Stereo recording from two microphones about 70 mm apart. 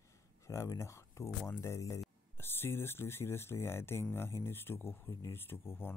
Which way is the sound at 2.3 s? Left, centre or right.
Left.